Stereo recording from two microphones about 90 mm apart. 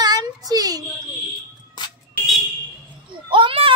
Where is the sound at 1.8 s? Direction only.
55° left (ahead or behind).